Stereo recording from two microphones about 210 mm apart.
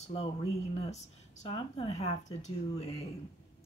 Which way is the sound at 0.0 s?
30° left (ahead or behind).